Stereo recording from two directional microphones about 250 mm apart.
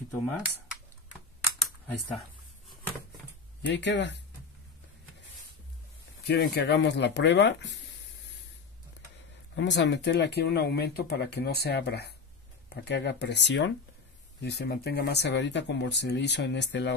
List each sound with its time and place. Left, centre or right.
1.6 s typing: centre
3.6 s speech: left
6.2 s speech: left
9.6 s speech: left